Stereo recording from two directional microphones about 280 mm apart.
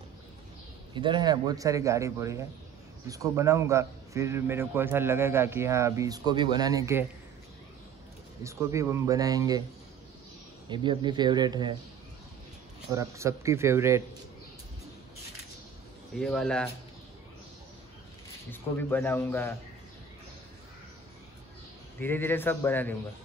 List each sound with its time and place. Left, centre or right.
0.9 s a man's voice: centre
8.5 s a man's voice: centre
10.7 s a man's voice: centre
12.9 s a man's voice: centre
16.2 s speech: centre
18.5 s speech: centre
22.0 s speech: centre